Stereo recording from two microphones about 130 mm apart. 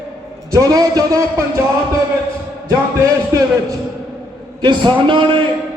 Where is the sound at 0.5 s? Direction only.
25° right (ahead or behind).